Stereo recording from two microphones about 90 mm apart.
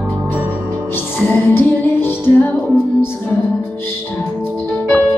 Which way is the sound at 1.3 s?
25° left (ahead or behind).